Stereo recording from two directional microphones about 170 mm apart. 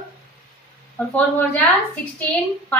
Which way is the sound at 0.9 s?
10° left (ahead or behind).